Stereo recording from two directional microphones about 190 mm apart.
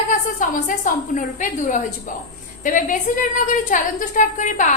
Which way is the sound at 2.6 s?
45° left (ahead or behind).